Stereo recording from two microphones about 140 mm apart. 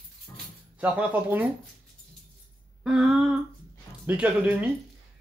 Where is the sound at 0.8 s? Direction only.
10° right (ahead or behind).